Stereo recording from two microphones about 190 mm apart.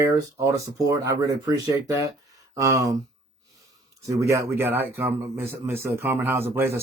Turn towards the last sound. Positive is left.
turn(degrees=-10)  # may be behind; listen again after turning